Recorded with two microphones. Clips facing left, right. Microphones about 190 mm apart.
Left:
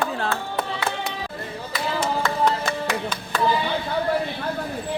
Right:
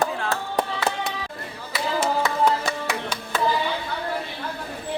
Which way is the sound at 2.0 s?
10° right (ahead or behind).